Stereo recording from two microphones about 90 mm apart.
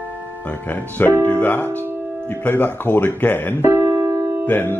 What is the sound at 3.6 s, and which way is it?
Keyboard, 35° right (ahead or behind).